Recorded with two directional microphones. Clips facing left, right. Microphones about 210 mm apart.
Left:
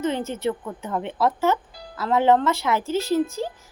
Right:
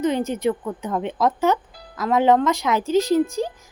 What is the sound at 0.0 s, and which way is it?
Speech, 15° right (ahead or behind).